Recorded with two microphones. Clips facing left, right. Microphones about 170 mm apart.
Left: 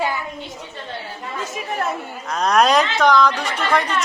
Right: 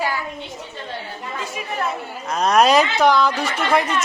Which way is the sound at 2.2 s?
5° right (ahead or behind).